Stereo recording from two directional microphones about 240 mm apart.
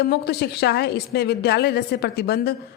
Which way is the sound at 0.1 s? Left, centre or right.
Left.